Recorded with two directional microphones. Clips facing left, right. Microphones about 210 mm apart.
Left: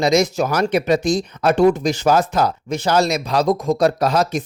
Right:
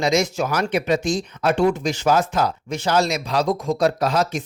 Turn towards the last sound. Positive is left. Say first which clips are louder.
# left 3 dB
turn(degrees=40)  # may be behind; listen again after turning